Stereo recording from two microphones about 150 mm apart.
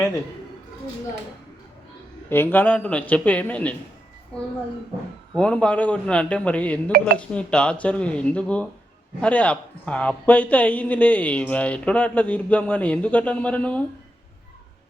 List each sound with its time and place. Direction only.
2.3 s speech: 15° left (ahead or behind)
5.3 s speech: 5° left (ahead or behind)